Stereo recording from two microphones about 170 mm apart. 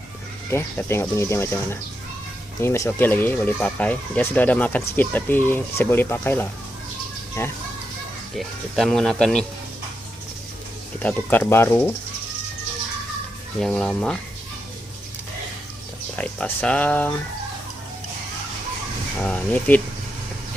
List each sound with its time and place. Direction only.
0.5 s speech: 15° left (ahead or behind)
8.4 s speech: centre (ahead or behind)
11.0 s speech: 10° left (ahead or behind)
13.6 s speech: centre (ahead or behind)
16.1 s speech: 10° left (ahead or behind)
19.2 s speech: 10° left (ahead or behind)